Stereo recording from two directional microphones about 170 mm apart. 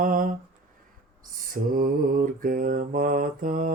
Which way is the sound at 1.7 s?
55° right (ahead or behind).